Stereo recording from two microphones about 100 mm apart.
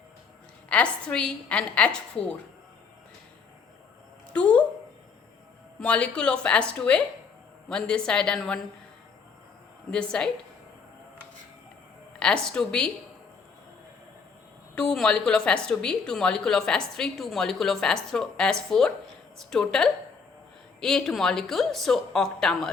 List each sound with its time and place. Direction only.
0.7 s a woman's voice: 10° left (ahead or behind)
4.3 s speech: 10° left (ahead or behind)
5.8 s a woman's voice: 10° left (ahead or behind)
9.9 s a woman's voice: 10° left (ahead or behind)
12.2 s a woman's voice: 10° left (ahead or behind)
14.8 s a woman's voice: 5° left (ahead or behind)